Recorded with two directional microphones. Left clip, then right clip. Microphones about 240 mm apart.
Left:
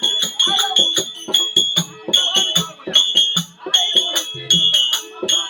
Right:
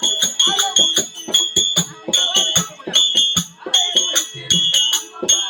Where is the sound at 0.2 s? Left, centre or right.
Centre.